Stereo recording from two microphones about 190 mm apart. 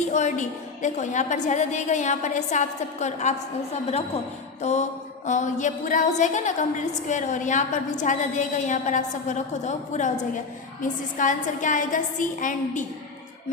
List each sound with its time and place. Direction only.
0.1 s a woman's voice: 40° left (ahead or behind)
4.6 s a woman's voice: 35° left (ahead or behind)
11.2 s a woman's voice: 45° left (ahead or behind)